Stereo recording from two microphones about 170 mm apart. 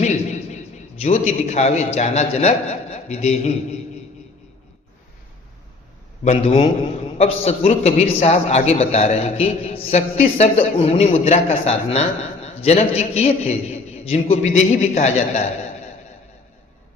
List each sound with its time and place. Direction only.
0.0 s a sound: 45° left (ahead or behind)
1.0 s a man's voice: 40° left (ahead or behind)
6.2 s a man's voice: 35° left (ahead or behind)